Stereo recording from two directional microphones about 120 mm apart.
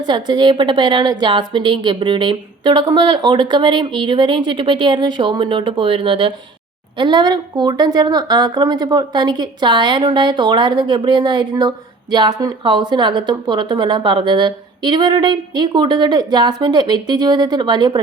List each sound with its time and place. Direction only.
0.0 s a woman's voice: 40° right (ahead or behind)